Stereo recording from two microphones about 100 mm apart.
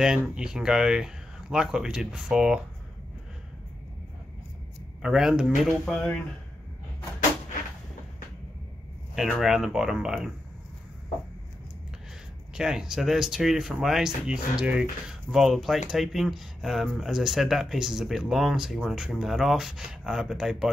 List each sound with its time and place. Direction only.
0.0 s speech: 10° right (ahead or behind)
5.0 s speech: 5° right (ahead or behind)
5.9 s speech: 15° left (ahead or behind)
9.1 s speech: 5° right (ahead or behind)
12.5 s speech: 5° right (ahead or behind)